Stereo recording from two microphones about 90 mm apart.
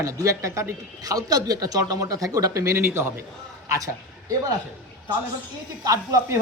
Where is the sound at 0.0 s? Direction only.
40° right (ahead or behind).